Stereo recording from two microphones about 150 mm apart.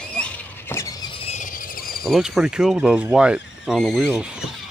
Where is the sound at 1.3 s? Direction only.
65° left (ahead or behind); by 2.0 s 80° left.